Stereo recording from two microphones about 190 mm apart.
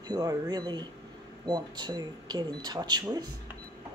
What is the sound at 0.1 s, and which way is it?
Speech, 20° right (ahead or behind).